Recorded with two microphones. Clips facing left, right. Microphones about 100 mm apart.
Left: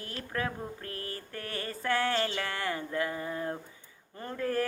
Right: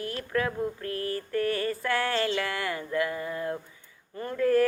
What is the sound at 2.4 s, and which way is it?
Music, 30° left (ahead or behind).